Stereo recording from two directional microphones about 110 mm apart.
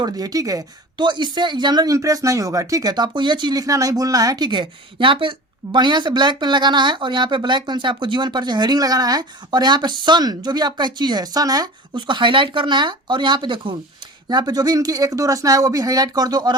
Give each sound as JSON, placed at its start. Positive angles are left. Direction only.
{"t": 0.0, "sound": "speech", "side_deg": -35}